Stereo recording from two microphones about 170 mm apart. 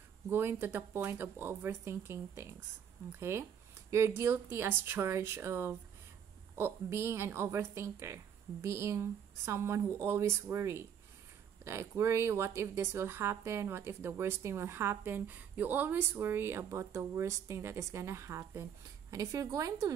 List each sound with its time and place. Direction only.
0.3 s a woman's voice: 15° right (ahead or behind)